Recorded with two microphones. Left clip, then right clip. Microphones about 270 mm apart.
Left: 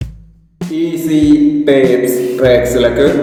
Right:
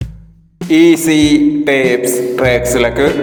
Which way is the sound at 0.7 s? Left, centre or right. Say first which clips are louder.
Right 6 dB; right.